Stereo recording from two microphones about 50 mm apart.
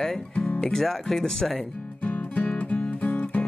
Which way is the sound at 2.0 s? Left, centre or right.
Left.